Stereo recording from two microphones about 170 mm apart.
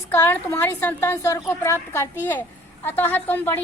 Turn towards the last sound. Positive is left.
turn(degrees=10)  # may be behind; listen again after turning